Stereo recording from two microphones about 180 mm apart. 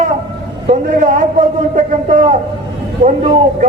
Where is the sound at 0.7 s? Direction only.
45° right (ahead or behind).